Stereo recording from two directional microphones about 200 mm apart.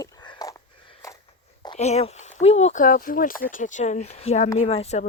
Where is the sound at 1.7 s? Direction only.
35° left (ahead or behind).